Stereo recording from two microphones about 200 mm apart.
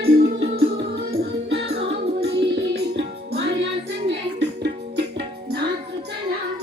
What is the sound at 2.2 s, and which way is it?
Music, 60° right (ahead or behind).